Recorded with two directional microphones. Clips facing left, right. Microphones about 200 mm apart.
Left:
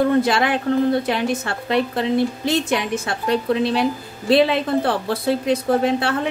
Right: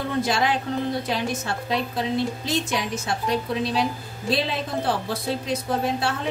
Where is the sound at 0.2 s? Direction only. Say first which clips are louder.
Left 4 dB; 60° left (ahead or behind).